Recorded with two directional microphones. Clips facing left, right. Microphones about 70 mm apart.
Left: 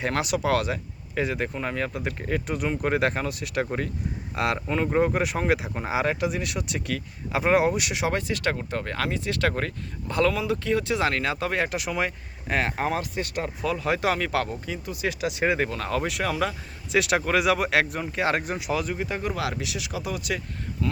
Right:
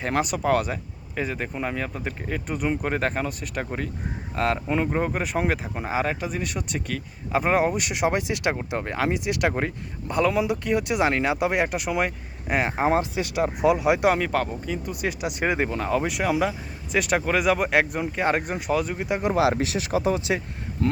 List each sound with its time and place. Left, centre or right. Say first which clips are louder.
0.0 s speech: right 1 dB; centre
4.6 s speech: left 1 dB; centre
8.3 s speech: right 1 dB; centre
10.1 s speech: right 1 dB; centre
16.9 s speech: even; centre
19.2 s speech: right 7 dB; right
19.5 s speech: right 7 dB; right
20.8 s speech: right 4 dB; right